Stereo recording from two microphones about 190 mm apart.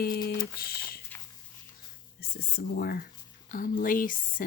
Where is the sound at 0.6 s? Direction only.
50° left (ahead or behind).